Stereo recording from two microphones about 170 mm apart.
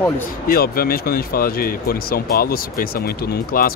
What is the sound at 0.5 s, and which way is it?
Speech, 60° left (ahead or behind).